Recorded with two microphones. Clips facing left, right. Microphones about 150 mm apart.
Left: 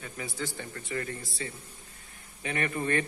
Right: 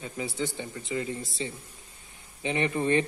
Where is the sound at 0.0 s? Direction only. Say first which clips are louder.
Right 5 dB; 25° right (ahead or behind).